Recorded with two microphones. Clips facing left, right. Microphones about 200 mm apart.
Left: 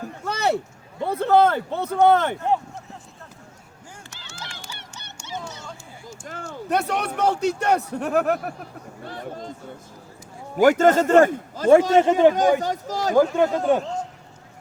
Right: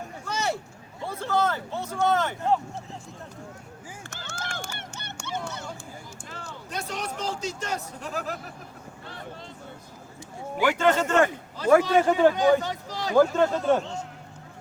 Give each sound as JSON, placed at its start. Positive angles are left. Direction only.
{"t": 0.3, "sound": "a sound", "side_deg": 60}
{"t": 1.0, "sound": "speech", "side_deg": 60}
{"t": 4.1, "sound": "run", "side_deg": -50}
{"t": 6.2, "sound": "a man's voice", "side_deg": 50}
{"t": 9.0, "sound": "a sound", "side_deg": 45}
{"t": 10.6, "sound": "a man's voice", "side_deg": 45}
{"t": 11.9, "sound": "a man's voice", "side_deg": 20}
{"t": 12.3, "sound": "a man's voice", "side_deg": 45}
{"t": 13.1, "sound": "speech", "side_deg": 15}